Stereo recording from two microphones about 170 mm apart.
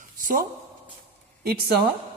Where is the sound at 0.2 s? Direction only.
55° right (ahead or behind).